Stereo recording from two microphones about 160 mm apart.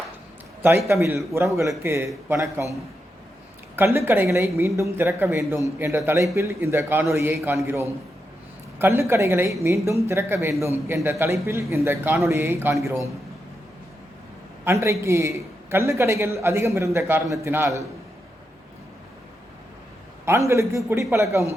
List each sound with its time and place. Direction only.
0.9 s a man's voice: 15° right (ahead or behind)
3.8 s a man's voice: 15° right (ahead or behind)
14.6 s a man's voice: 15° right (ahead or behind)
20.2 s a man's voice: 20° right (ahead or behind)